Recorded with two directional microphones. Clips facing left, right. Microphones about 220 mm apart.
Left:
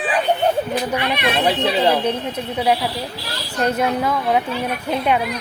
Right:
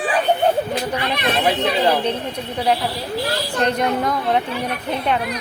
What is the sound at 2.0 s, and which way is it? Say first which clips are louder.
A woman's voice: left 1 dB; 10° left (ahead or behind).